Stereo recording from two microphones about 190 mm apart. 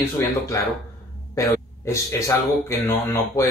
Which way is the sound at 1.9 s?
15° left (ahead or behind).